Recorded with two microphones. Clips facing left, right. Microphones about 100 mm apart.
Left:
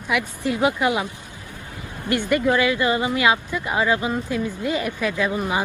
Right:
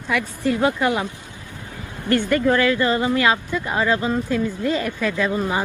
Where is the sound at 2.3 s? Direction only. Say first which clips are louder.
Even; 15° left (ahead or behind).